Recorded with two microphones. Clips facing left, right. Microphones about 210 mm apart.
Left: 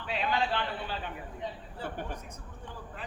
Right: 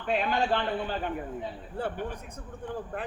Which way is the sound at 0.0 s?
50° right (ahead or behind).